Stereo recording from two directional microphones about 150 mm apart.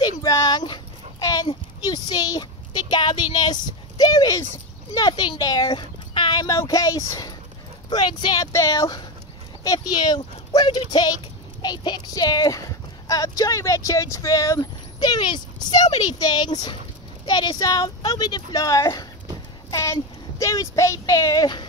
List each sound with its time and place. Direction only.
0.0 s dog: 25° left (ahead or behind)
1.2 s a sound: 25° left (ahead or behind)
4.9 s speech: 30° left (ahead or behind)